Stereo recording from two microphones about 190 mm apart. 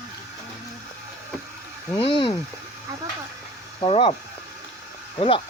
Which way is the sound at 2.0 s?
30° left (ahead or behind).